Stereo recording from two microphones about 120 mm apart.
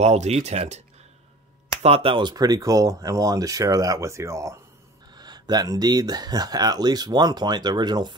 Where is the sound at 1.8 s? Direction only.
55° right (ahead or behind); by 4.6 s 25° right (ahead or behind).